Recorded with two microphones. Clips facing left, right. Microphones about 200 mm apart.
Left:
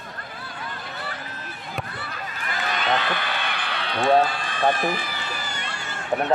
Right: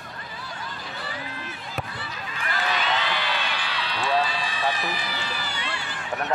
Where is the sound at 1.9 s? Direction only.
55° left (ahead or behind).